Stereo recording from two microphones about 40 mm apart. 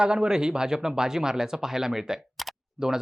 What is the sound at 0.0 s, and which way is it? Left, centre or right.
Speech, right.